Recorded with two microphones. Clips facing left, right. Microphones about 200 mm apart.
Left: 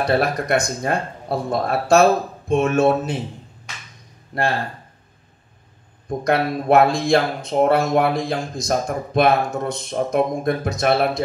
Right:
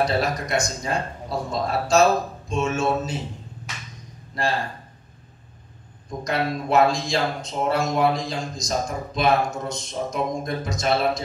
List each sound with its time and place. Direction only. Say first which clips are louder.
0.0 s speech: left 3 dB; 60° left (ahead or behind)
4.3 s speech: left 4 dB; 60° left (ahead or behind)
6.0 s speech: left 5 dB; 55° left (ahead or behind)